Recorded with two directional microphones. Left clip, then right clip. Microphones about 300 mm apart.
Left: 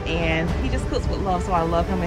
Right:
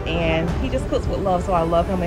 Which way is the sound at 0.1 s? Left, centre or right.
Centre.